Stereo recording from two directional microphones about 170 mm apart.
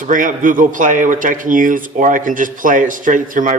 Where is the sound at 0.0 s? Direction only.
50° right (ahead or behind).